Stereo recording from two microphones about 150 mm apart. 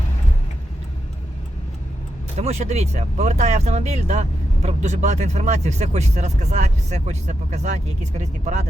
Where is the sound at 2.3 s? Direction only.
45° right (ahead or behind).